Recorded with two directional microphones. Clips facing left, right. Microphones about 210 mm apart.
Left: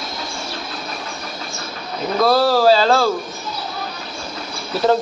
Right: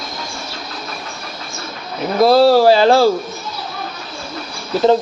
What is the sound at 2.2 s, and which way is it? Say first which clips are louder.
Speech: right 5 dB; 25° right (ahead or behind).